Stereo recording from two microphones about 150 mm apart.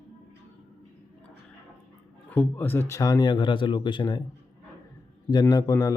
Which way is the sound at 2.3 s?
10° left (ahead or behind).